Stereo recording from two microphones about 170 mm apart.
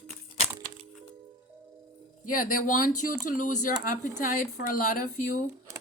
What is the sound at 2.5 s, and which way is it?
Speech, 55° left (ahead or behind).